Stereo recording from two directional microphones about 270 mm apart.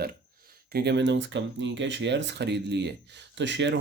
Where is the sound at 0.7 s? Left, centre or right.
Right.